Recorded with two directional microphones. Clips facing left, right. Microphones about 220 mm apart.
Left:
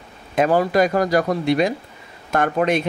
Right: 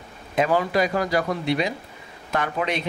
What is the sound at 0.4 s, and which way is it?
Speech, 45° left (ahead or behind).